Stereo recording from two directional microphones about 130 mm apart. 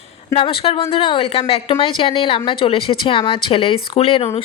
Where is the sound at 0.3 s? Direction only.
45° left (ahead or behind).